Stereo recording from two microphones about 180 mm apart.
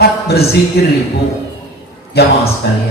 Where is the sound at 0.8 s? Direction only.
65° left (ahead or behind).